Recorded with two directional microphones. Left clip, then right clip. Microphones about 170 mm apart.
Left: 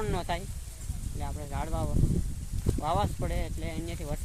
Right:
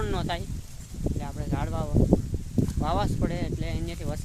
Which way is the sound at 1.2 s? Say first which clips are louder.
Left 2 dB; 10° right (ahead or behind).